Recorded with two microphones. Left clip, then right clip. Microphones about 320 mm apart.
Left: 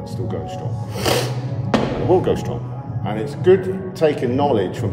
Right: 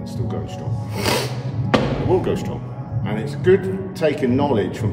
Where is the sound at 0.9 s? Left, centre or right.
Centre.